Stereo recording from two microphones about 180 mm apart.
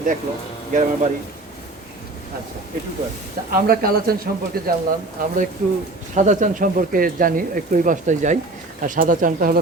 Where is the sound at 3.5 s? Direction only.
55° right (ahead or behind).